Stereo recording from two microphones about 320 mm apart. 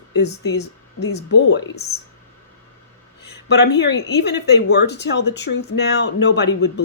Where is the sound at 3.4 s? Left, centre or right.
Left.